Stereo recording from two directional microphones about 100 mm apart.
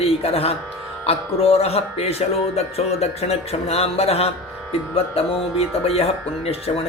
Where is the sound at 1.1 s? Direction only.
75° left (ahead or behind); by 4.3 s 90° left.